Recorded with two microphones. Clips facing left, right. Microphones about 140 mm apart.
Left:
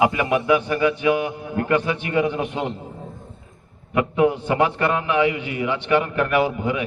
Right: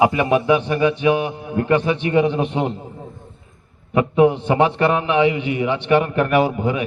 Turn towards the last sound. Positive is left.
turn(degrees=-25)  # may be behind; listen again after turning